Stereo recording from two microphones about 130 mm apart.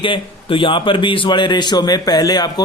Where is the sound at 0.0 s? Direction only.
40° left (ahead or behind).